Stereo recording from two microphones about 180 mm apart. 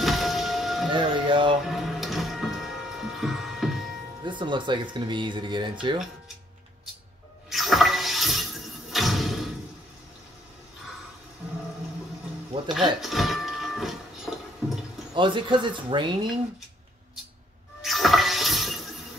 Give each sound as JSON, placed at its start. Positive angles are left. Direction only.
{"t": 0.0, "sound": "music", "side_deg": 0}
{"t": 0.9, "sound": "music", "side_deg": -25}
{"t": 1.6, "sound": "printer", "side_deg": 0}
{"t": 4.2, "sound": "speech", "side_deg": -25}
{"t": 7.4, "sound": "a sound", "side_deg": 0}
{"t": 8.9, "sound": "thump", "side_deg": 0}
{"t": 12.7, "sound": "a sound", "side_deg": 0}
{"t": 15.1, "sound": "speech", "side_deg": -25}
{"t": 17.8, "sound": "a sound", "side_deg": 0}